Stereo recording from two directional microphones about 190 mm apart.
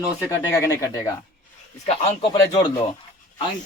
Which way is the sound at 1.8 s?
35° left (ahead or behind).